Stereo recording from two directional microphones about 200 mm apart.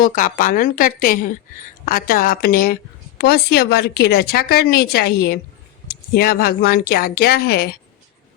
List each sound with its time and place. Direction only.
0.0 s speech: 45° left (ahead or behind)